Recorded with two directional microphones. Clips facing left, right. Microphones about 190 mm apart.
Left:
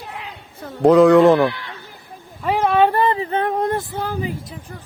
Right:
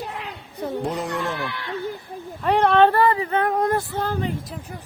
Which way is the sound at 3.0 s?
25° left (ahead or behind).